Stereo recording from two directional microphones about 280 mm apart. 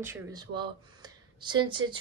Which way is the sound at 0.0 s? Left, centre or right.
Centre.